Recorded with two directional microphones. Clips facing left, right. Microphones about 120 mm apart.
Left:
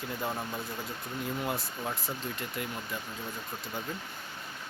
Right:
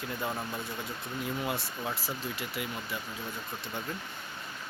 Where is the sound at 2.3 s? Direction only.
5° right (ahead or behind).